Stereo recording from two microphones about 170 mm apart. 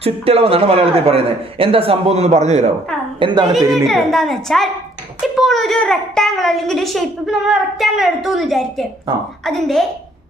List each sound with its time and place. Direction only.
0.0 s a man's voice: 35° right (ahead or behind)
3.2 s a woman's voice: 30° right (ahead or behind)
3.8 s a child's voice: centre (ahead or behind)